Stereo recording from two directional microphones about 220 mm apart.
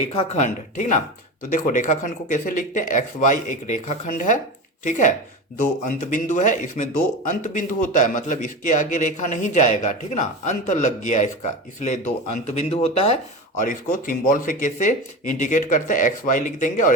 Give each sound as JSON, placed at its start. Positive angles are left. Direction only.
{"t": 0.1, "sound": "a man's voice", "side_deg": 30}